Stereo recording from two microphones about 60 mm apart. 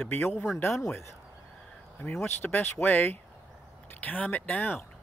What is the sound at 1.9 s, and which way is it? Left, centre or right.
Speech, left.